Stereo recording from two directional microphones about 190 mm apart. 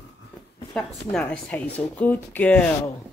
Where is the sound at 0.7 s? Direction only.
5° left (ahead or behind).